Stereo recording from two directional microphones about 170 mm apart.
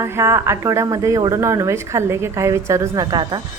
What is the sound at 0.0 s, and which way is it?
Speech, 15° right (ahead or behind).